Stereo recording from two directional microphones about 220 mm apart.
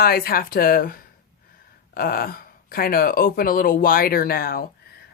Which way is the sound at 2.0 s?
40° left (ahead or behind).